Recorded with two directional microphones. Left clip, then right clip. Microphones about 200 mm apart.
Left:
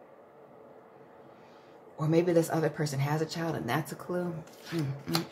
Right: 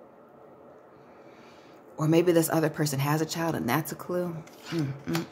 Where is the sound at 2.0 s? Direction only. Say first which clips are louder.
Right 3 dB; 40° right (ahead or behind).